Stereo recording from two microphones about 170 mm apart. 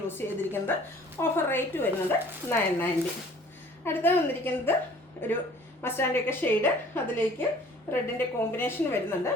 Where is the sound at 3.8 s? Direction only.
10° left (ahead or behind).